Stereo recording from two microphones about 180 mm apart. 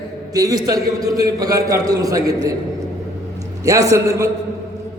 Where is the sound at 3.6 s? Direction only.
20° right (ahead or behind).